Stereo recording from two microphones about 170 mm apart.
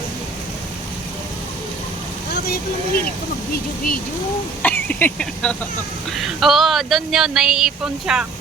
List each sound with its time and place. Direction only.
2.3 s speech: 65° left (ahead or behind)
4.6 s speech: 10° left (ahead or behind)